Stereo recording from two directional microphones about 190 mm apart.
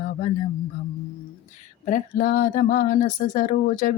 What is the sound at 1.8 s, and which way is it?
Female singing, 40° left (ahead or behind).